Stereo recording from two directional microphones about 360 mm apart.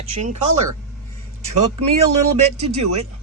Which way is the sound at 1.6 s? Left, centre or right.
Right.